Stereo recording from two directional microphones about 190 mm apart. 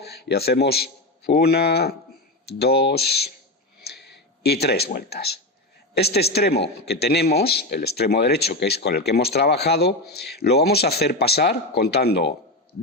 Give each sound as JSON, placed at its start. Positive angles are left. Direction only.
{"t": 0.0, "sound": "a man's voice", "side_deg": 60}
{"t": 4.4, "sound": "a man's voice", "side_deg": 55}